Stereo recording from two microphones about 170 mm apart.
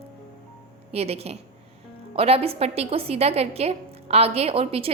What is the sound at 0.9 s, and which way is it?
A woman's voice, 35° right (ahead or behind).